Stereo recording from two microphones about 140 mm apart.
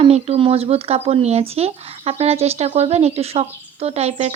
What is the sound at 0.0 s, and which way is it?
Speech, 45° right (ahead or behind).